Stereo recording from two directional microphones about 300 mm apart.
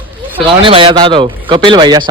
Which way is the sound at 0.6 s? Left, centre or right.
Centre.